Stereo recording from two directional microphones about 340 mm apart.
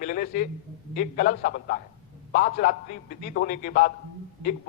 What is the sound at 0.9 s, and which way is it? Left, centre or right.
A man's voice, left.